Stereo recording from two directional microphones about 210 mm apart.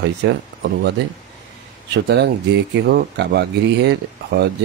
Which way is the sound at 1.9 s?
55° right (ahead or behind).